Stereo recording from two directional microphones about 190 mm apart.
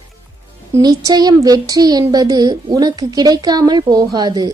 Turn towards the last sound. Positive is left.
turn(degrees=-20)  # may be behind; listen again after turning